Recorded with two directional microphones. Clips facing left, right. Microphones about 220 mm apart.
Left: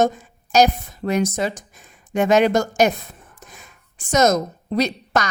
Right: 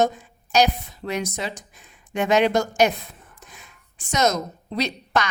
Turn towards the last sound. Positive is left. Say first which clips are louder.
# left 3 dB
turn(degrees=45)  # may be behind; listen again after turning